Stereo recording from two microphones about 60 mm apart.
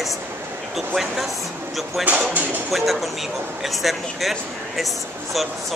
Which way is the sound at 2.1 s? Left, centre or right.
Right.